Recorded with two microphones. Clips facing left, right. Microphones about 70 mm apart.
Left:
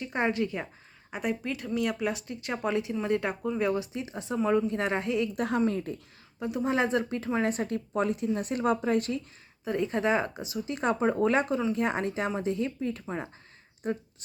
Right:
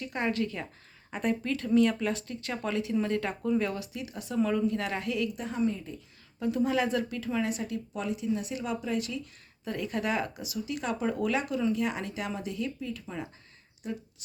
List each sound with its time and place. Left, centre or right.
0.0 s speech: left
5.4 s speech: left
6.4 s speech: left
9.6 s speech: left